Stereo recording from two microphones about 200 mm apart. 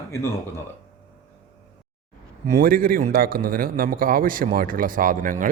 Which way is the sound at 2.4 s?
45° right (ahead or behind).